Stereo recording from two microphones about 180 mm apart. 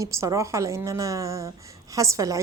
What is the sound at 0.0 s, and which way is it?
A woman's voice, 15° right (ahead or behind).